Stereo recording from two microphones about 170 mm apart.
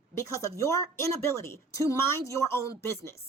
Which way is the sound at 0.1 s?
15° left (ahead or behind).